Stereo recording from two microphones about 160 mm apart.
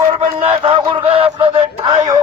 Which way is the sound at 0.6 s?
35° right (ahead or behind).